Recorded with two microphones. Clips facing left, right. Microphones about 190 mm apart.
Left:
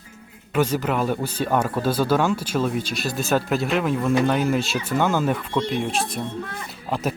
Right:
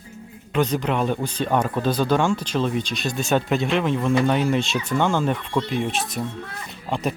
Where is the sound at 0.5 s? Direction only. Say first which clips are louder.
Even; 5° left (ahead or behind).